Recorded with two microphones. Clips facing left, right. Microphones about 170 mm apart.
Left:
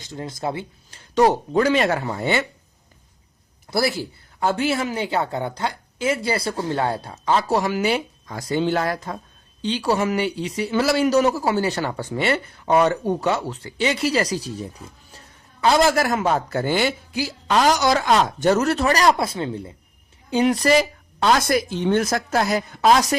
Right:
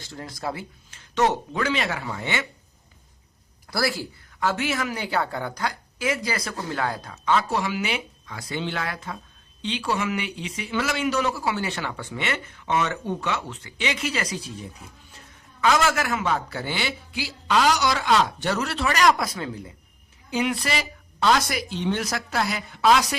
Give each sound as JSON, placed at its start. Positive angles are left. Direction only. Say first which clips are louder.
{"t": 0.0, "sound": "speech", "louder": "left 4 dB", "side_deg": 20}
{"t": 0.9, "sound": "speech", "louder": "left 5 dB", "side_deg": 35}
{"t": 3.7, "sound": "speech", "louder": "left 4 dB", "side_deg": 20}
{"t": 4.4, "sound": "a man's voice", "louder": "left 4 dB", "side_deg": 30}
{"t": 20.3, "sound": "a man's voice", "louder": "left 8 dB", "side_deg": 40}